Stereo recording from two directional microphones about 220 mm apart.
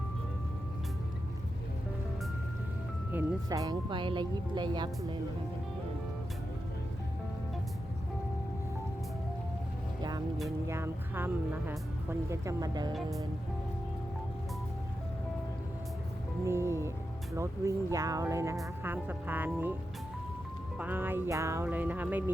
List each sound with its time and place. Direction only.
3.1 s speech: 10° right (ahead or behind)
10.0 s music: 20° right (ahead or behind)
10.7 s speech: 10° right (ahead or behind)
16.5 s speech: 10° right (ahead or behind)
20.7 s speech: 10° right (ahead or behind)